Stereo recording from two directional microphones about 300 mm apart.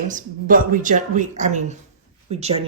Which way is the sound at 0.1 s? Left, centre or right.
Right.